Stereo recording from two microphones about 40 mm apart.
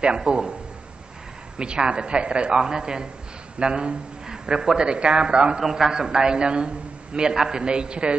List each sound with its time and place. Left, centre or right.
0.0 s speech: right
1.6 s speech: right
5.6 s a man's voice: centre